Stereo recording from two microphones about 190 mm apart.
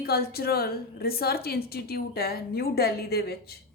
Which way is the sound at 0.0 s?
55° left (ahead or behind).